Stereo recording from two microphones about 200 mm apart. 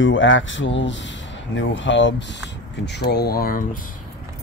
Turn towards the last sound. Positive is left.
turn(degrees=45)  # may be behind; listen again after turning